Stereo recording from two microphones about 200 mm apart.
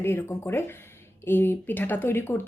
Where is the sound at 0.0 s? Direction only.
10° left (ahead or behind).